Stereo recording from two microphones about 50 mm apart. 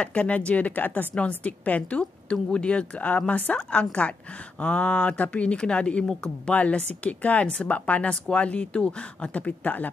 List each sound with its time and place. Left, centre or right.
0.0 s speech: left
1.1 s speech: left
6.5 s speech: left